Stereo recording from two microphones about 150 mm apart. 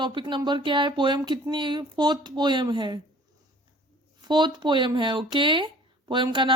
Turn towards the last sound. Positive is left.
turn(degrees=-35)  # may be behind; listen again after turning